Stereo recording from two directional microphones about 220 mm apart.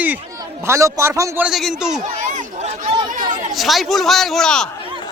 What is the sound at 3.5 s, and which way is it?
Speech, centre (ahead or behind).